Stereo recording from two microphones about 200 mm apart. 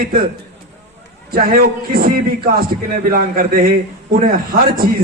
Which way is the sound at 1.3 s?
45° right (ahead or behind).